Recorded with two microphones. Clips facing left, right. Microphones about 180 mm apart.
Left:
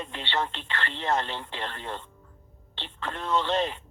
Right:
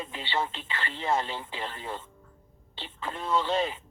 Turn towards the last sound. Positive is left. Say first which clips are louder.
# left 1 dB
turn(degrees=-10)  # may be behind; listen again after turning